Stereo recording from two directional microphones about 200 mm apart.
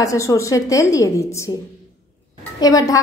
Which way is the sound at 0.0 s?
15° left (ahead or behind).